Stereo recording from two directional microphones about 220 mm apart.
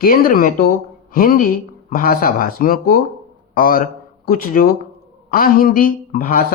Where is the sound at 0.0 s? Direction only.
40° left (ahead or behind).